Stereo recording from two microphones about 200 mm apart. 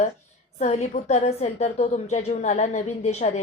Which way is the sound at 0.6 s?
35° left (ahead or behind).